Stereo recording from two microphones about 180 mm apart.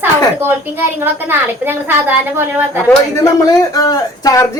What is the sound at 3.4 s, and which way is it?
A woman's voice, 20° left (ahead or behind).